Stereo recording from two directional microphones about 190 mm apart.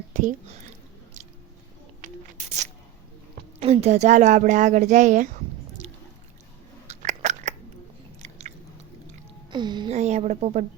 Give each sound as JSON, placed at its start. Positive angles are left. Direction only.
{"t": 0.1, "sound": "speech", "side_deg": -45}
{"t": 2.4, "sound": "a woman's voice", "side_deg": -35}
{"t": 3.6, "sound": "a woman's voice", "side_deg": -35}
{"t": 6.8, "sound": "biting", "side_deg": -35}
{"t": 9.5, "sound": "speech", "side_deg": -25}
{"t": 9.9, "sound": "a woman's voice", "side_deg": -35}